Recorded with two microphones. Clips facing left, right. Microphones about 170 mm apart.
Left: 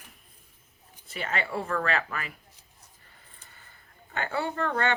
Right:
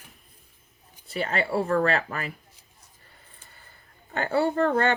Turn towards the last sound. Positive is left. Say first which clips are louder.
# right 6 dB
turn(degrees=-35)  # may be behind; listen again after turning